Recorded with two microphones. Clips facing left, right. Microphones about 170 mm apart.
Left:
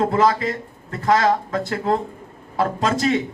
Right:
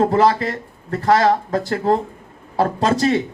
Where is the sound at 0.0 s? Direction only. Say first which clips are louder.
Right 3 dB; 35° right (ahead or behind).